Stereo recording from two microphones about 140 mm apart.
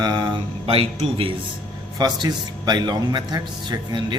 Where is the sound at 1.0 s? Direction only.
40° right (ahead or behind).